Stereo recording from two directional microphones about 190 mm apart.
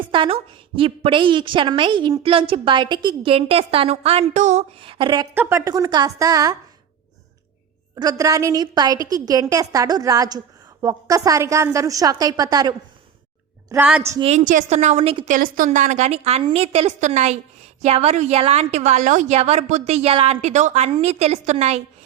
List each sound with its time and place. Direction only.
0.1 s a sound: 25° right (ahead or behind)
0.8 s a woman's voice: 30° right (ahead or behind)
7.9 s a woman's voice: 20° right (ahead or behind)
13.7 s a woman's voice: 10° right (ahead or behind)
14.2 s a woman's voice: 35° right (ahead or behind)
15.4 s a woman's voice: 45° right (ahead or behind)